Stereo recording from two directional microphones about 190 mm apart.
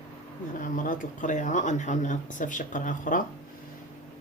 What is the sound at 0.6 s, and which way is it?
Speech, 45° left (ahead or behind).